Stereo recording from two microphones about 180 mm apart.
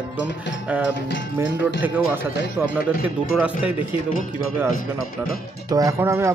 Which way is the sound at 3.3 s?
5° right (ahead or behind).